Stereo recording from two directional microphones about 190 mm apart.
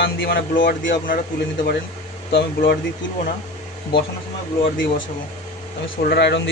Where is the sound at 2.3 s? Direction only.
55° left (ahead or behind).